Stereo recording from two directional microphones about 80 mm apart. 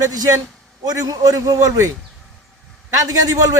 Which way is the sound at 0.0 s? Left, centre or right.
Right.